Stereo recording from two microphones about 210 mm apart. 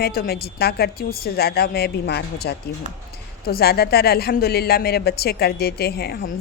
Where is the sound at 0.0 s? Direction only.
45° left (ahead or behind).